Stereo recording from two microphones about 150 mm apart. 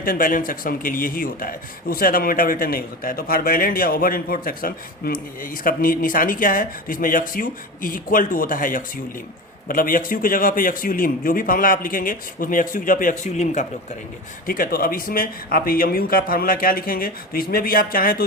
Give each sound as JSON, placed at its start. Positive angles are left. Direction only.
{"t": 0.0, "sound": "speech", "side_deg": 70}
{"t": 14.4, "sound": "speech", "side_deg": 70}